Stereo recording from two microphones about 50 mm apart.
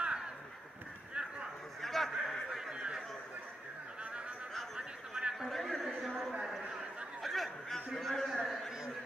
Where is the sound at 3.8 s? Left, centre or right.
Centre.